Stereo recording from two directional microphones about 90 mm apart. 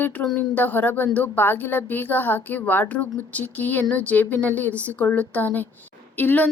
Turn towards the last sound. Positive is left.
turn(degrees=20)  # may be behind; listen again after turning